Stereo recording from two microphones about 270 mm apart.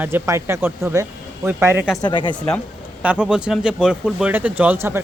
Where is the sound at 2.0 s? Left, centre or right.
Centre.